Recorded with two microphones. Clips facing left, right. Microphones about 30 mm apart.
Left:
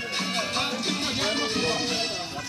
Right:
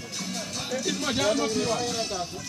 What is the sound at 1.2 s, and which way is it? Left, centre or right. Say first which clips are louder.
Speech: right 3 dB; left.